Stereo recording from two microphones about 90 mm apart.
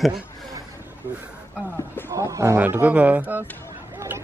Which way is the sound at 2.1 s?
35° right (ahead or behind).